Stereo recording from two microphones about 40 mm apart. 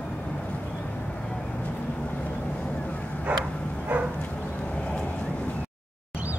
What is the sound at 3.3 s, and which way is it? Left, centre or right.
Vehicle, right.